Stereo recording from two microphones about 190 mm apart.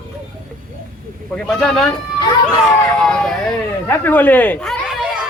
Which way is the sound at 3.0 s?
5° left (ahead or behind).